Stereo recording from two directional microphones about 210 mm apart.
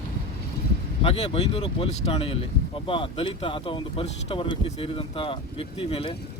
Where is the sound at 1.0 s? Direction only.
30° left (ahead or behind).